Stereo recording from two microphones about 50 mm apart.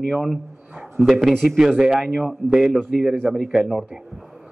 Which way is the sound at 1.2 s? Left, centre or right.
Centre.